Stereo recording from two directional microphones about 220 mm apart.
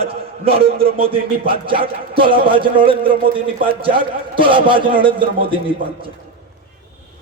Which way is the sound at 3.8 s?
25° right (ahead or behind).